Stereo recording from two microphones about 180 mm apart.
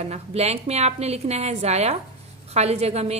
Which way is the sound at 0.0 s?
35° right (ahead or behind).